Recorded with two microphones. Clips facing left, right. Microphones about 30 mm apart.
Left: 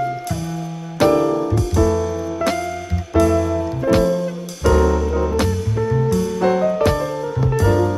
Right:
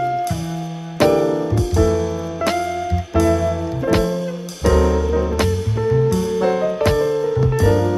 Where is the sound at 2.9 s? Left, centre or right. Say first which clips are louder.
Left 2 dB; centre.